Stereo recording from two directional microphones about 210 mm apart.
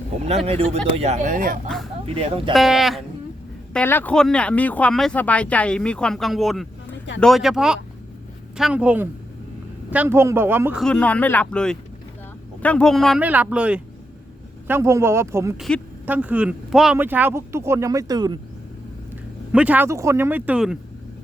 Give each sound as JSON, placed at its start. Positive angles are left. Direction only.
{"t": 0.3, "sound": "speech", "side_deg": -30}
{"t": 1.6, "sound": "speech", "side_deg": 0}
{"t": 2.0, "sound": "speech", "side_deg": -30}
{"t": 2.5, "sound": "speech", "side_deg": 0}
{"t": 10.8, "sound": "speech", "side_deg": 5}
{"t": 15.5, "sound": "speech", "side_deg": 0}
{"t": 19.5, "sound": "speech", "side_deg": -5}